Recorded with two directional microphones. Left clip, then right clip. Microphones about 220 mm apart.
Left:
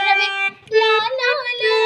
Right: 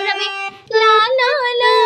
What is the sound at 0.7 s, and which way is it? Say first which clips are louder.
Child singing: right 5 dB; 50° right (ahead or behind).